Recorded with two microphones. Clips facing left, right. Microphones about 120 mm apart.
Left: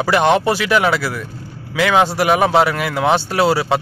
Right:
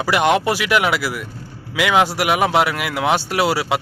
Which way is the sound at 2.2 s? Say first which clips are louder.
Left 3 dB; 10° right (ahead or behind).